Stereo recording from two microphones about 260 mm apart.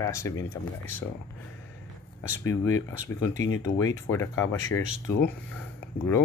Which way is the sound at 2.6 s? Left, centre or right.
Centre.